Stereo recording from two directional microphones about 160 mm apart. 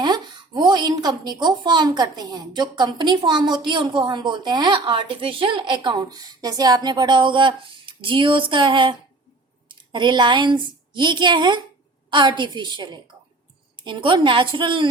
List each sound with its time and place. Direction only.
0.0 s a woman's voice: 25° right (ahead or behind)